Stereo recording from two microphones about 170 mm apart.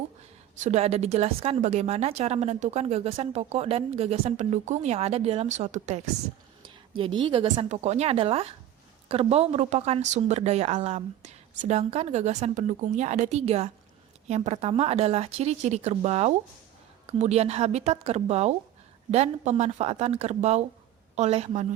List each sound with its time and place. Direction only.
0.5 s speech: 45° right (ahead or behind)
6.9 s a woman's voice: 30° right (ahead or behind)
7.7 s speech: 40° right (ahead or behind)